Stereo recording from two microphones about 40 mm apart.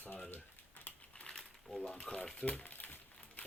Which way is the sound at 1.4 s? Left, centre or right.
Centre.